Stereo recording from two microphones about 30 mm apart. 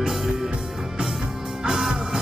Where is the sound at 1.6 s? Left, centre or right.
Centre.